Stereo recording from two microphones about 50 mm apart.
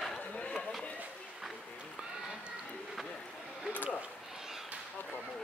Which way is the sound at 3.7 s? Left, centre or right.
Left.